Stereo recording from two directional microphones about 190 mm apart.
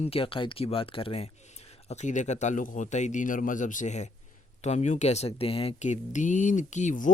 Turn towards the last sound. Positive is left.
turn(degrees=40)  # may be behind; listen again after turning